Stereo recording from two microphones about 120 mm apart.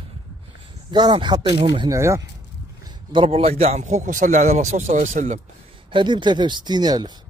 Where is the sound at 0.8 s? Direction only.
40° right (ahead or behind).